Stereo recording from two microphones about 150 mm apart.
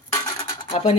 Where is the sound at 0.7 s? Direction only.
40° left (ahead or behind).